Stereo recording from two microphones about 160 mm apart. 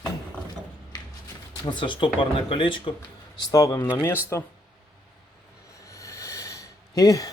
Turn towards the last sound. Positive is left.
turn(degrees=20)  # may be behind; listen again after turning